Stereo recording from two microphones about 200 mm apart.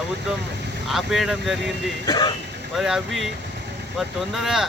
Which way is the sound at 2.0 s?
20° left (ahead or behind).